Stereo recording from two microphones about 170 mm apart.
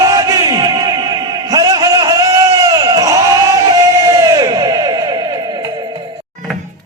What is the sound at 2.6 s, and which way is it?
Crowd, 25° right (ahead or behind).